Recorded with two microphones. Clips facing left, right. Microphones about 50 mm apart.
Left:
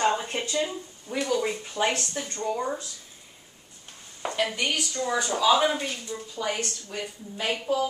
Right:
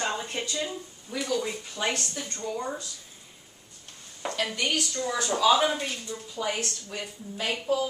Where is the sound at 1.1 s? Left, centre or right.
Centre.